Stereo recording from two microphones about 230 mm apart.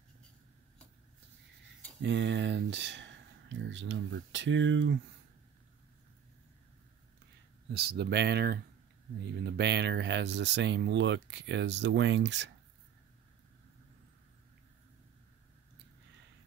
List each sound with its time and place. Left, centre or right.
2.0 s speech: right
7.7 s speech: right